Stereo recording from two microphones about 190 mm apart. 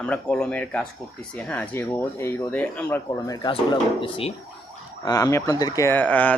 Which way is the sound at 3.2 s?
20° left (ahead or behind).